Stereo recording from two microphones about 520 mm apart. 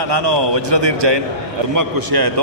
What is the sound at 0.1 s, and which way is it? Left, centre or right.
Speech, right.